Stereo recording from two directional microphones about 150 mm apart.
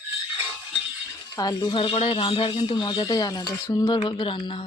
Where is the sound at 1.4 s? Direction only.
25° left (ahead or behind).